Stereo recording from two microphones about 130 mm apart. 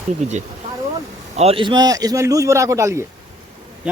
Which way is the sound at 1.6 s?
35° right (ahead or behind).